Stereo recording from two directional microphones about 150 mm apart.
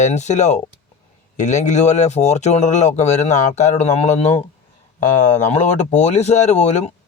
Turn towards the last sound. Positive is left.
turn(degrees=50)  # may be behind; listen again after turning